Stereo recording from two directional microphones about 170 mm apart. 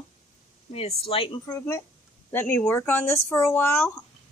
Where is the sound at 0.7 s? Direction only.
35° left (ahead or behind).